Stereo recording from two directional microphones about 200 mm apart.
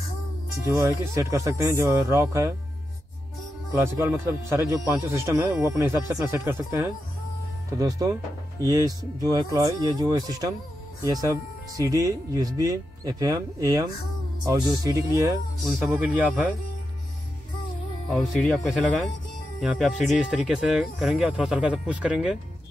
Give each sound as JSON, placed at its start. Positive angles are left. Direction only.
{"t": 0.7, "sound": "speech", "side_deg": -15}
{"t": 3.7, "sound": "speech", "side_deg": -15}
{"t": 18.5, "sound": "speech", "side_deg": 0}